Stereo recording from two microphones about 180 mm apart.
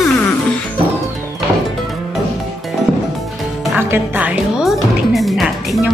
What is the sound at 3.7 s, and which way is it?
Music, 10° right (ahead or behind).